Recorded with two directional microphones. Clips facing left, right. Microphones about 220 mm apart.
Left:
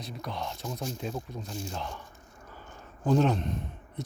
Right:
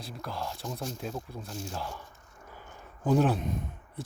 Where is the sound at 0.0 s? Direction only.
5° right (ahead or behind).